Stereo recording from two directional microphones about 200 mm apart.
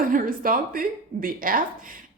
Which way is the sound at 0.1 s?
45° right (ahead or behind).